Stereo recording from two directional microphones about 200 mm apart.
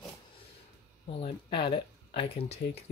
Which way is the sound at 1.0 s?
30° left (ahead or behind).